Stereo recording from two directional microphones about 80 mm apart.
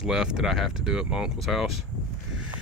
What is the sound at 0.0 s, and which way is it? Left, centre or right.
Speech, centre.